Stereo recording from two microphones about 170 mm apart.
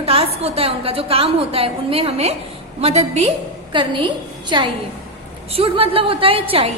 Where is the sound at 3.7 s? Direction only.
30° right (ahead or behind).